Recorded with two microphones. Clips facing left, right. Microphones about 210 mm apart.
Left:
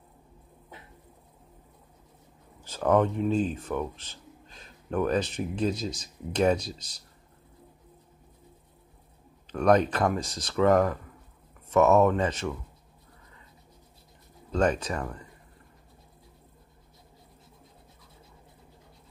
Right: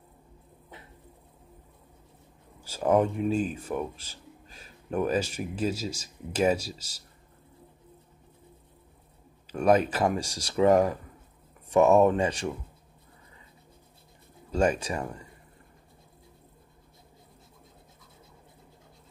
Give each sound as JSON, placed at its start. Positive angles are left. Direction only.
{"t": 2.6, "sound": "speech", "side_deg": -10}
{"t": 9.5, "sound": "speech", "side_deg": -5}
{"t": 14.5, "sound": "speech", "side_deg": -10}